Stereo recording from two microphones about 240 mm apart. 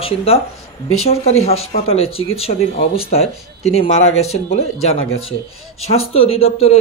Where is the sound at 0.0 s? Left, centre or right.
Left.